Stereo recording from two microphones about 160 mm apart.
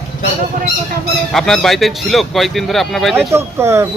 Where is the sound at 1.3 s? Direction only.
Centre (ahead or behind).